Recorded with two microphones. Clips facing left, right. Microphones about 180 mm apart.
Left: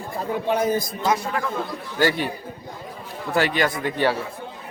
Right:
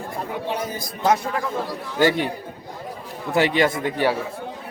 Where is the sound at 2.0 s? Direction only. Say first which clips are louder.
Right 2 dB; 20° right (ahead or behind).